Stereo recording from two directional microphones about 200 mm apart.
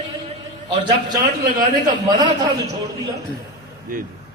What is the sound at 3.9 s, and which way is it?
Speech, 45° right (ahead or behind).